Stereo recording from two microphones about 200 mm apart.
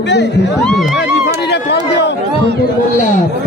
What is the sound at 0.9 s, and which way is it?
Music, 55° left (ahead or behind).